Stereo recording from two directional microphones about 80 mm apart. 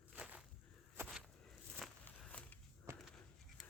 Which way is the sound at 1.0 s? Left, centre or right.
Right.